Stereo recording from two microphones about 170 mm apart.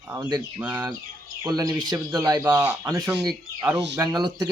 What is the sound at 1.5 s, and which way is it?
Speech, 20° right (ahead or behind).